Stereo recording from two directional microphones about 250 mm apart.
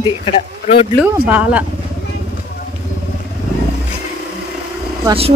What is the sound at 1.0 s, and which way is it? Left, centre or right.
Speech, centre.